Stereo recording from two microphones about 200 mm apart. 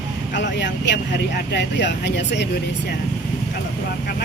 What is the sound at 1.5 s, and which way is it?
Speech, 60° left (ahead or behind).